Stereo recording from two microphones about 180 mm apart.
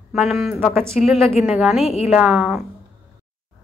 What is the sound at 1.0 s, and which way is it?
Speech, 45° left (ahead or behind).